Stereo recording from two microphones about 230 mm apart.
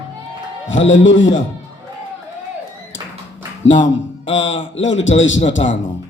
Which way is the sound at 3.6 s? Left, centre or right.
Left.